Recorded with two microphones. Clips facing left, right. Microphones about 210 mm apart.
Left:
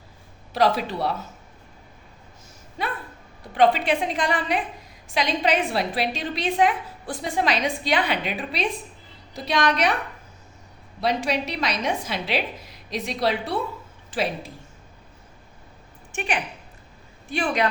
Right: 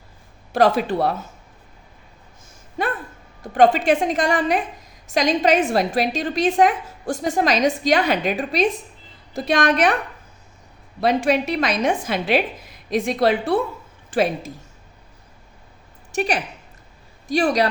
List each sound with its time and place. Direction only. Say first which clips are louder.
0.5 s a woman's voice: right 5 dB; 50° right (ahead or behind)
2.8 s a woman's voice: right 5 dB; 50° right (ahead or behind)
11.0 s a woman's voice: right 6 dB; 50° right (ahead or behind)
16.1 s a man's voice: right 5 dB; 40° right (ahead or behind)